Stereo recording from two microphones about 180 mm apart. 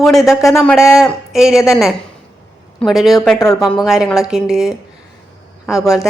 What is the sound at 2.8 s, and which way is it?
A woman's voice, centre (ahead or behind).